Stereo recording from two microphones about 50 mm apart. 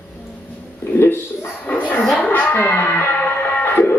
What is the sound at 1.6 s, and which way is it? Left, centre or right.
Dog, left.